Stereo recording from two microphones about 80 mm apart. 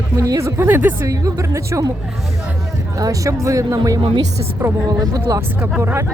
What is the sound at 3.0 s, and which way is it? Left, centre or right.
Speech, right.